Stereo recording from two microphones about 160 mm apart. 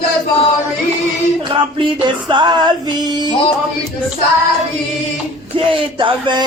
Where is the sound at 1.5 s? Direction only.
30° right (ahead or behind).